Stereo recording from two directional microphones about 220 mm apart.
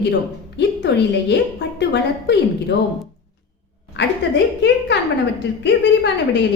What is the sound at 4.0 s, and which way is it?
Speech, 50° left (ahead or behind).